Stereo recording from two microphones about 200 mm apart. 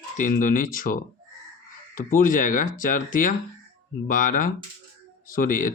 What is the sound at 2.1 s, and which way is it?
Speech, 40° left (ahead or behind).